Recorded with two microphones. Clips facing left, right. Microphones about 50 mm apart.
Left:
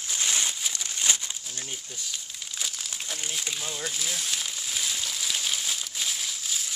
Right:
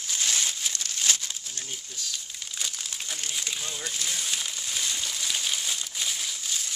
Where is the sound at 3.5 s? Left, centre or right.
Centre.